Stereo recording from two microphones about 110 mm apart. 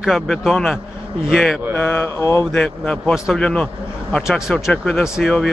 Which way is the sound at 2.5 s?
10° left (ahead or behind).